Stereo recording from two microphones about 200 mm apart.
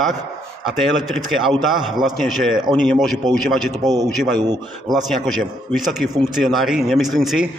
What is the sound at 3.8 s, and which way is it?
Speech, 15° right (ahead or behind).